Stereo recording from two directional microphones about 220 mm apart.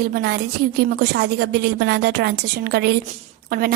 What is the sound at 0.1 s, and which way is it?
A woman's voice, 45° right (ahead or behind).